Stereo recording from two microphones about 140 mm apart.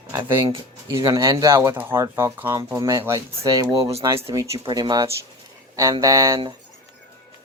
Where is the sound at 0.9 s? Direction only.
25° right (ahead or behind).